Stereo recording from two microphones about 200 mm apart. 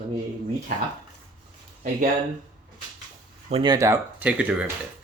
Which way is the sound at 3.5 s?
25° right (ahead or behind).